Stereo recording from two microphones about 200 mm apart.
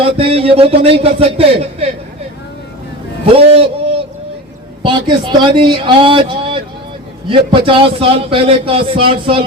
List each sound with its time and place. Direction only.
0.0 s a man's voice: 30° right (ahead or behind)
3.2 s a man's voice: 30° right (ahead or behind)
4.8 s a man's voice: 25° right (ahead or behind)